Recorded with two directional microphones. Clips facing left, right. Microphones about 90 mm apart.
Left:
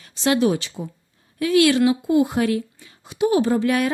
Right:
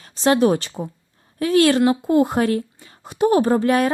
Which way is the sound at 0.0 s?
40° right (ahead or behind).